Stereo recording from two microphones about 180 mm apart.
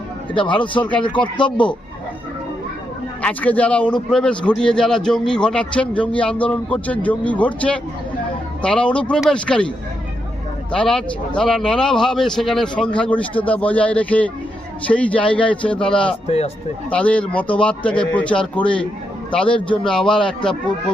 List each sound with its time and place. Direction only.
0.3 s speech: 25° left (ahead or behind)
3.2 s a man's voice: 10° left (ahead or behind)
10.7 s a man's voice: 5° left (ahead or behind)
16.2 s speech: 35° left (ahead or behind)
16.9 s a man's voice: 5° left (ahead or behind)